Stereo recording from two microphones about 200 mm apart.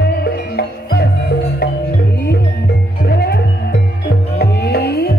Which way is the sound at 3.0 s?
55° left (ahead or behind).